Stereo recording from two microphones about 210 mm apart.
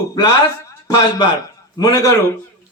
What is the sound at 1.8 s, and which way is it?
Speech, 15° left (ahead or behind).